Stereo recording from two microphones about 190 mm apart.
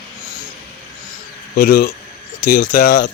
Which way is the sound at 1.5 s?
50° left (ahead or behind).